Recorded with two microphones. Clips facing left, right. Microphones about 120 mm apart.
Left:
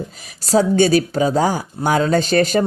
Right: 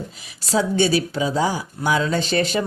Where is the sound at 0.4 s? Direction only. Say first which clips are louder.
Left 5 dB; 45° left (ahead or behind).